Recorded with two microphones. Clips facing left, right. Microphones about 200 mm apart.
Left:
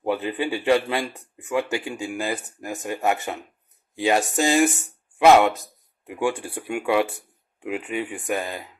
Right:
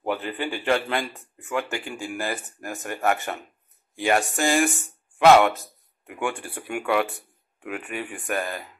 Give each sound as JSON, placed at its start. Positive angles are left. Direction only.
{"t": 0.0, "sound": "a man's voice", "side_deg": 20}
{"t": 6.1, "sound": "a man's voice", "side_deg": 25}